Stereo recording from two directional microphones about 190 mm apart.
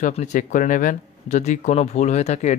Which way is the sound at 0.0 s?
45° left (ahead or behind).